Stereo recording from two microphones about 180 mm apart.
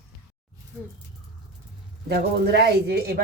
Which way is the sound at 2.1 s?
65° right (ahead or behind).